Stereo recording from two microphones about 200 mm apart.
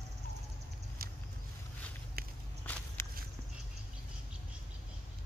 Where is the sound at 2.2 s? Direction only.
50° right (ahead or behind).